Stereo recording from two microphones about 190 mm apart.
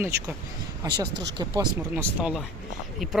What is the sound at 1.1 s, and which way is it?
Speech, 65° right (ahead or behind).